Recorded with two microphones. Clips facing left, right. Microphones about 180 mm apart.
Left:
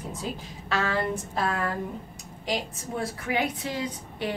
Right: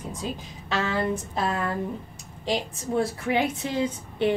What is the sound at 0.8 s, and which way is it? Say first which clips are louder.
A woman's voice: right 2 dB; 20° right (ahead or behind).